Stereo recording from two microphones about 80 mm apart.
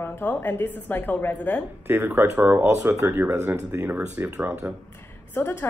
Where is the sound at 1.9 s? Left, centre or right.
Right.